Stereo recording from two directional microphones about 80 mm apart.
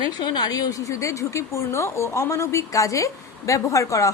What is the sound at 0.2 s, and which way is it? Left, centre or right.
A woman's voice, left.